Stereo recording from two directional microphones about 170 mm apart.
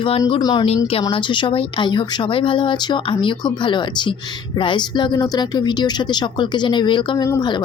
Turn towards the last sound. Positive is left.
turn(degrees=20)  # may be behind; listen again after turning